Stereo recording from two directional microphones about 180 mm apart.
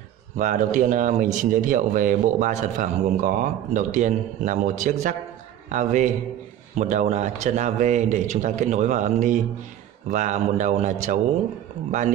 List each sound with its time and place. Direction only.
0.4 s a man's voice: 45° right (ahead or behind)